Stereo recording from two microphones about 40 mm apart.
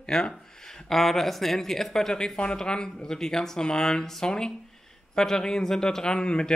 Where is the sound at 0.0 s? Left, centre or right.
Centre.